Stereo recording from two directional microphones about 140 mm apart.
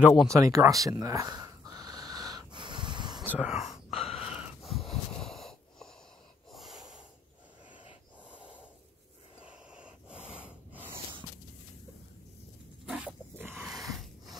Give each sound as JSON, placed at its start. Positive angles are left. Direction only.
{"t": 0.3, "sound": "a sound", "side_deg": -20}
{"t": 3.3, "sound": "speech", "side_deg": -5}
{"t": 3.9, "sound": "gasp", "side_deg": 45}
{"t": 4.3, "sound": "wheeze", "side_deg": -5}
{"t": 6.5, "sound": "snort", "side_deg": 0}
{"t": 8.3, "sound": "snort", "side_deg": -10}
{"t": 10.0, "sound": "wheeze", "side_deg": -10}
{"t": 12.8, "sound": "wild animals", "side_deg": -10}
{"t": 13.6, "sound": "a sound", "side_deg": -5}